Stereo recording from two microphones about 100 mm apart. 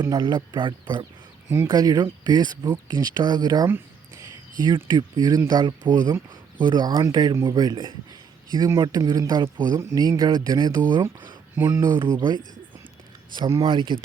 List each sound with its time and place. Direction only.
0.0 s speech: 45° right (ahead or behind)
1.6 s speech: 40° right (ahead or behind)
13.6 s speech: 50° right (ahead or behind)